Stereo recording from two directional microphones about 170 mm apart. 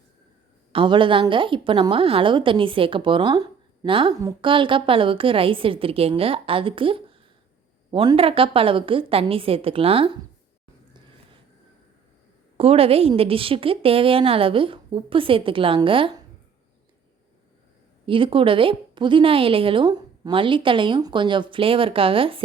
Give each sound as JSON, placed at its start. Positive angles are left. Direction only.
{"t": 0.7, "sound": "a woman's voice", "side_deg": -30}
{"t": 12.5, "sound": "a woman's voice", "side_deg": -35}
{"t": 18.0, "sound": "a woman's voice", "side_deg": -30}